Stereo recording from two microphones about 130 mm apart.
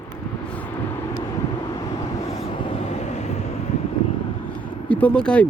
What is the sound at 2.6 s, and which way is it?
Vehicle, 45° left (ahead or behind).